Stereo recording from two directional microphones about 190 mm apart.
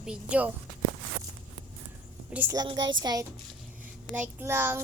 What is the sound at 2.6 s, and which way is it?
Speech, 25° right (ahead or behind).